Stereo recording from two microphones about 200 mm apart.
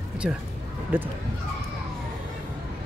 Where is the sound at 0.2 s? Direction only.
5° right (ahead or behind).